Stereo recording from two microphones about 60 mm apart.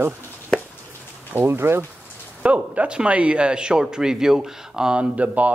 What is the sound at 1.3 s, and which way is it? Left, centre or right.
Speech, right.